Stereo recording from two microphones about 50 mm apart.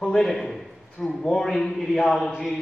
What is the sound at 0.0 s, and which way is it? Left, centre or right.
A man's voice, centre.